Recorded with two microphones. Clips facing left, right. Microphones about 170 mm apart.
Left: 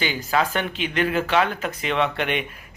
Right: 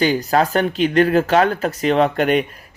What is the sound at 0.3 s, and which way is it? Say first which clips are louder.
Speech: right 6 dB; 40° right (ahead or behind).